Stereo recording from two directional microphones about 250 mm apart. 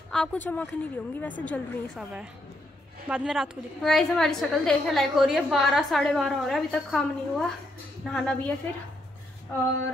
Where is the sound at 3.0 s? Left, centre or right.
Centre.